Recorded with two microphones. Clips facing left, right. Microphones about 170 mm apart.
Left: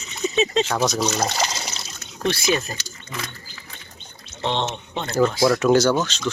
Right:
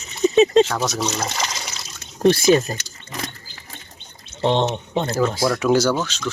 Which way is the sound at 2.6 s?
30° right (ahead or behind).